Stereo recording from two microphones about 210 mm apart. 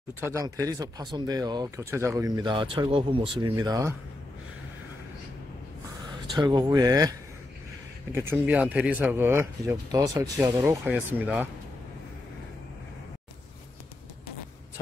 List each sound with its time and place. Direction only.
0.2 s speech: 15° right (ahead or behind)
6.3 s speech: 20° right (ahead or behind)